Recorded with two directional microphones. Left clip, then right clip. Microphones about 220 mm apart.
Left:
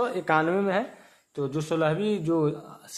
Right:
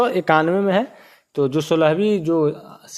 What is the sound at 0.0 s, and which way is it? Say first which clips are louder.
Speech: right 8 dB; 35° right (ahead or behind).